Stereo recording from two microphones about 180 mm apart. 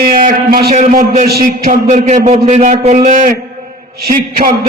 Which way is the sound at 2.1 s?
40° right (ahead or behind).